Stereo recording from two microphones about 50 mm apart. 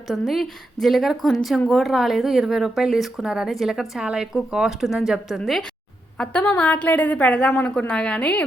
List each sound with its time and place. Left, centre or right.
0.1 s speech: centre
6.2 s a woman's voice: centre
6.6 s a woman's voice: left